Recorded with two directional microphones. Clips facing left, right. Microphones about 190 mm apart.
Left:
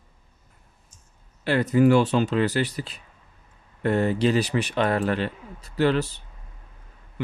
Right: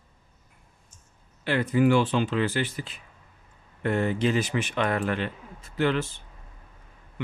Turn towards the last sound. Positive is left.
turn(degrees=40)  # may be behind; listen again after turning